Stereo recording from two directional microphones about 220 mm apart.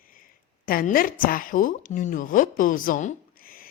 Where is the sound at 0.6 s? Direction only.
40° left (ahead or behind).